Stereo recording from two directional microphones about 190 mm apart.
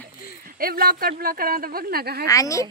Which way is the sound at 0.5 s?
50° right (ahead or behind).